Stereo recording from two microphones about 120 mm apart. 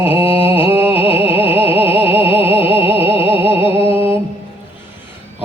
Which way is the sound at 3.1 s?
50° left (ahead or behind).